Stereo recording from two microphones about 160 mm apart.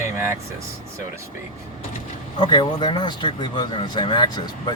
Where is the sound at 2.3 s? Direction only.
30° left (ahead or behind).